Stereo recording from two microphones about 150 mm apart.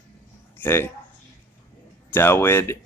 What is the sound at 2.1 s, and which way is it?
Speech, 15° left (ahead or behind).